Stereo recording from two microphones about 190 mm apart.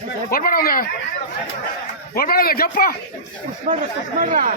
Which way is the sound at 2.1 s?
50° left (ahead or behind).